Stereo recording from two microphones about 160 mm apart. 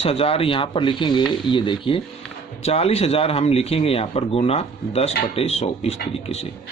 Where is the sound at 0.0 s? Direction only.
35° left (ahead or behind).